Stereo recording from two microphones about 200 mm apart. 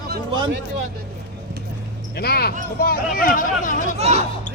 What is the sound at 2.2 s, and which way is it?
Speech, 50° left (ahead or behind).